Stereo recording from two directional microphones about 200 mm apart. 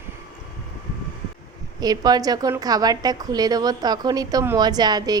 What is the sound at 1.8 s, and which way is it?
A woman's voice, 20° right (ahead or behind).